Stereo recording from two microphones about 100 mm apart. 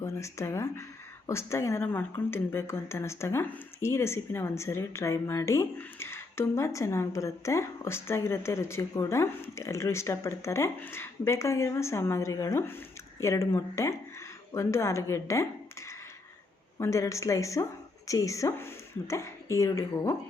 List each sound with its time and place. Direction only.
0.0 s a woman's voice: 30° left (ahead or behind)
16.7 s speech: 30° left (ahead or behind)